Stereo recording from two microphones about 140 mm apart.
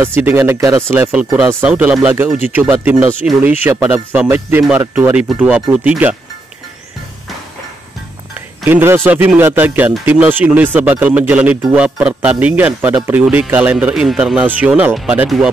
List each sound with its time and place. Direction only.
0.0 s speech: 15° right (ahead or behind)
8.6 s speech: 15° right (ahead or behind)